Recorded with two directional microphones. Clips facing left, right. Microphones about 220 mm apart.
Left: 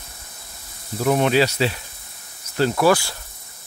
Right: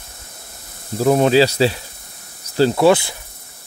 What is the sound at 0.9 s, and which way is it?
Insect, 35° right (ahead or behind).